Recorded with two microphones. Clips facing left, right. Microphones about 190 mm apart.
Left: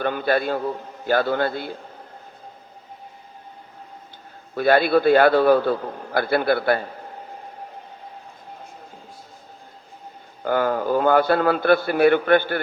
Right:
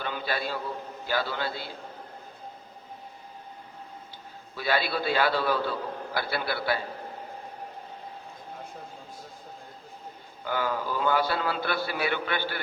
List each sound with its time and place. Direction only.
0.0 s a man's voice: 55° left (ahead or behind)
4.5 s a man's voice: 55° left (ahead or behind)
10.4 s a man's voice: 50° left (ahead or behind)